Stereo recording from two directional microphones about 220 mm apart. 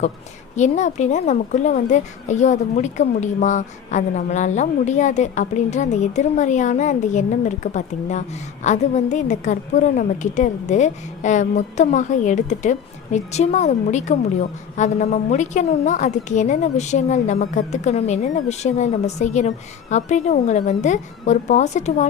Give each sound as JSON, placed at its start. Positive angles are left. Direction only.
{"t": 0.5, "sound": "a woman's voice", "side_deg": 35}